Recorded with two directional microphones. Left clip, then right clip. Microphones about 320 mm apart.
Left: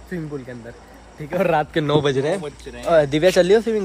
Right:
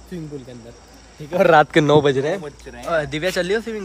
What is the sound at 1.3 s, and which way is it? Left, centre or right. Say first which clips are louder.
A man's voice: right 6 dB; right.